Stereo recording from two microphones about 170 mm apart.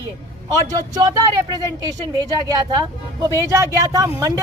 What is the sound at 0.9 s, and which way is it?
A woman's voice, 25° right (ahead or behind).